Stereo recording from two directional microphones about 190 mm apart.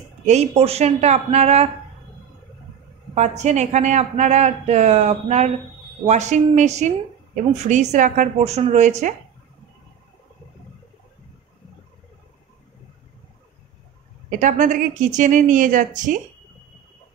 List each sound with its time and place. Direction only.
0.2 s speech: 35° right (ahead or behind)
3.2 s speech: 35° right (ahead or behind)
14.4 s speech: 40° right (ahead or behind)